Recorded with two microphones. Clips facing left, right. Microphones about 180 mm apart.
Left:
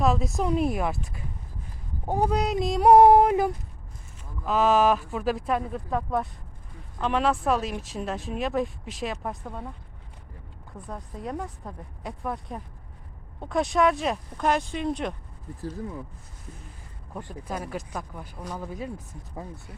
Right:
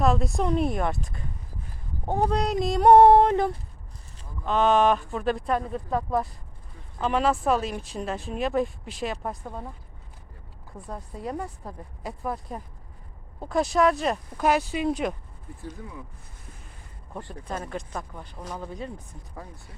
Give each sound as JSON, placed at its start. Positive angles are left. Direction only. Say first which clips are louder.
{"t": 0.0, "sound": "speech", "louder": "right 1 dB", "side_deg": 0}
{"t": 2.0, "sound": "speech", "louder": "even", "side_deg": 10}
{"t": 10.8, "sound": "speech", "louder": "right 1 dB", "side_deg": -5}
{"t": 17.2, "sound": "speech", "louder": "even", "side_deg": 10}
{"t": 18.9, "sound": "speech", "louder": "left 3 dB", "side_deg": 20}